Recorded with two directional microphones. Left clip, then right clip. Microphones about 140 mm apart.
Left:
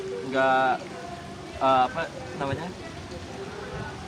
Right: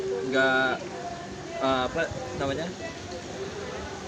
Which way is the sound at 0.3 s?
15° left (ahead or behind).